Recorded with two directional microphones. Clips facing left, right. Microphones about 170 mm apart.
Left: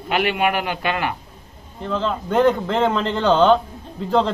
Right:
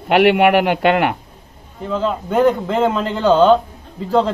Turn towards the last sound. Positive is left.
turn(degrees=0)  # may be behind; listen again after turning